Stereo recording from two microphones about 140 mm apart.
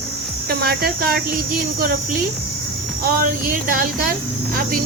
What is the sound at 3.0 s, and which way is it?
Speech, 90° right.